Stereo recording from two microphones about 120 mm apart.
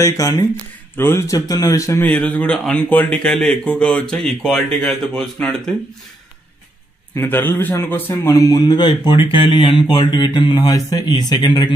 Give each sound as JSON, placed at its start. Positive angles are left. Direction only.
{"t": 0.0, "sound": "a man's voice", "side_deg": 30}
{"t": 0.9, "sound": "a man's voice", "side_deg": 20}
{"t": 2.0, "sound": "speech", "side_deg": 10}
{"t": 7.2, "sound": "a man's voice", "side_deg": 15}